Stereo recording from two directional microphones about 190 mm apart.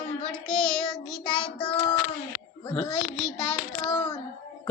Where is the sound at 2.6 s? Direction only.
20° left (ahead or behind).